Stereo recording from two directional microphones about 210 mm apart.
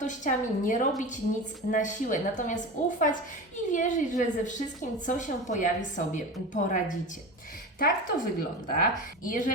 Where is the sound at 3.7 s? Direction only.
35° left (ahead or behind).